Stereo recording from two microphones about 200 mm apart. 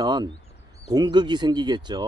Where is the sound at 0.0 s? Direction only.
20° right (ahead or behind).